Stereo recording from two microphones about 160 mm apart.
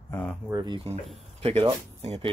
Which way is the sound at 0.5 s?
20° right (ahead or behind).